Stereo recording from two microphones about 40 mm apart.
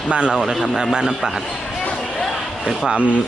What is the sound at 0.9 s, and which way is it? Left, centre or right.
Speech, centre.